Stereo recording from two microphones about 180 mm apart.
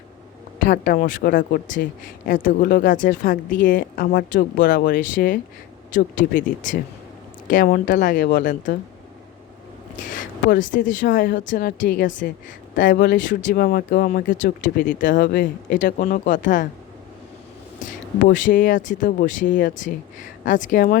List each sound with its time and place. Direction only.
0.6 s speech: 50° left (ahead or behind)
10.1 s speech: 45° left (ahead or behind)
17.7 s speech: 45° left (ahead or behind)